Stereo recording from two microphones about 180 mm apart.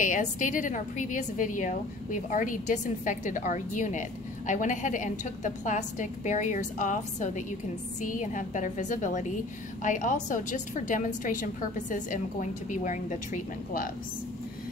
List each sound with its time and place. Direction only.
0.0 s a woman's voice: 45° left (ahead or behind)